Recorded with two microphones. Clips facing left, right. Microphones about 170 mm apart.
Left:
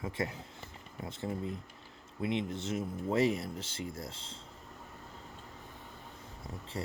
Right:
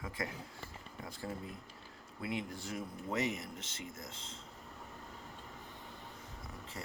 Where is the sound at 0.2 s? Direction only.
25° left (ahead or behind).